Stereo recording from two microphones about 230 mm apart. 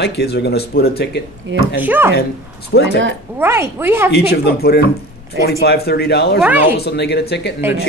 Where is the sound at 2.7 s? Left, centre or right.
Left.